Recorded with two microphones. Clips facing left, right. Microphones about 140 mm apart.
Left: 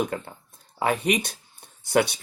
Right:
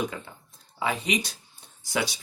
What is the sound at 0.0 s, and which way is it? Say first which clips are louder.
Speech: left 4 dB; 55° left (ahead or behind).